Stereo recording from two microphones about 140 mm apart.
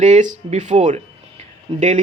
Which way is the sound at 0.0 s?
60° right (ahead or behind).